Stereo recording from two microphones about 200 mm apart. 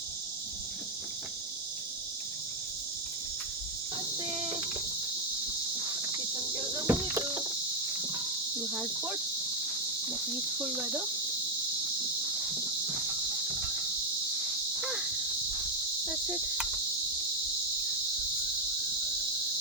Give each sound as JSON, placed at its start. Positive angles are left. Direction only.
{"t": 4.3, "sound": "a sound", "side_deg": -25}
{"t": 6.6, "sound": "cricket", "side_deg": -10}
{"t": 8.7, "sound": "cricket", "side_deg": -10}
{"t": 10.6, "sound": "cricket", "side_deg": -5}
{"t": 14.8, "sound": "insect", "side_deg": 0}
{"t": 16.0, "sound": "cricket", "side_deg": 0}